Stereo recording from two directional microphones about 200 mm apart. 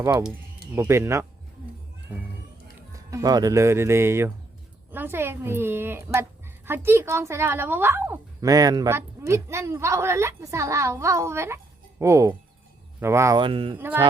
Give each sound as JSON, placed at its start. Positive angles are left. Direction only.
{"t": 0.7, "sound": "a woman's voice", "side_deg": -15}
{"t": 3.1, "sound": "a woman's voice", "side_deg": -15}
{"t": 13.7, "sound": "a woman's voice", "side_deg": -10}